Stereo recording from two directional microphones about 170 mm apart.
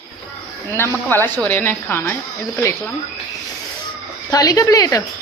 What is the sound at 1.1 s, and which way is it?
A woman's voice, 10° left (ahead or behind).